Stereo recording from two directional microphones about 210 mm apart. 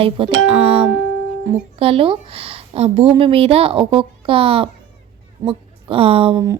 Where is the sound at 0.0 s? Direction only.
30° right (ahead or behind).